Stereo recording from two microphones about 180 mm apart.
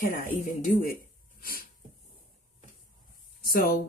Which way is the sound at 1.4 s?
55° left (ahead or behind).